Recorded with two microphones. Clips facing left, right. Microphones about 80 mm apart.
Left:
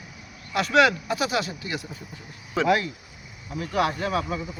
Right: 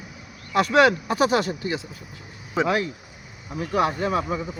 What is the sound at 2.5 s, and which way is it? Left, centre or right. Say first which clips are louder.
Speech: even; right.